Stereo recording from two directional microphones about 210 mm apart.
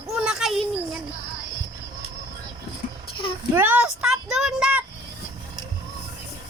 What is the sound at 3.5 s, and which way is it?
Speech, 10° right (ahead or behind).